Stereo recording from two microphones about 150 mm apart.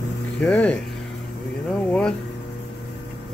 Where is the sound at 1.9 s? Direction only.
5° left (ahead or behind).